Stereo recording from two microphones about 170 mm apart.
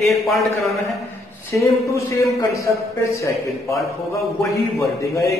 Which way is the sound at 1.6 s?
15° left (ahead or behind).